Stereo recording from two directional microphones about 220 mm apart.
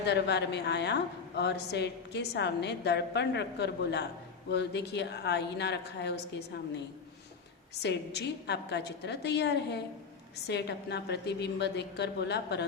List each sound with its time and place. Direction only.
0.0 s a woman's voice: 50° left (ahead or behind)
7.8 s a woman's voice: 50° left (ahead or behind)